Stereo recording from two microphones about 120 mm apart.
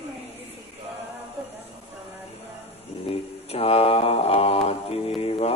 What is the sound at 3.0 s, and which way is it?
Mantra, 55° left (ahead or behind).